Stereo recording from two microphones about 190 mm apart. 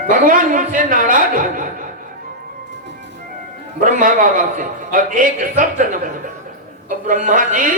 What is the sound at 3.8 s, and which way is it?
A man's voice, 45° right (ahead or behind).